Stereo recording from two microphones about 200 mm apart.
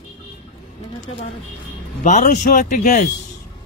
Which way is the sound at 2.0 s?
35° left (ahead or behind).